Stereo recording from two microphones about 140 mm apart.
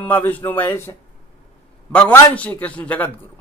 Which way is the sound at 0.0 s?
10° left (ahead or behind).